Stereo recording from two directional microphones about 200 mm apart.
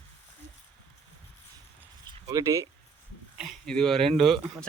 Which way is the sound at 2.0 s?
15° right (ahead or behind).